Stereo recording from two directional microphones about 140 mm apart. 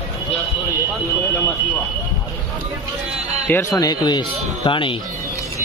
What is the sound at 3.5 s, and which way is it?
Speech, 20° left (ahead or behind).